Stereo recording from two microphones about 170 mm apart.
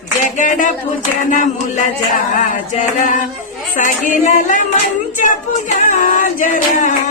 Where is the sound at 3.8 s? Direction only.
50° left (ahead or behind).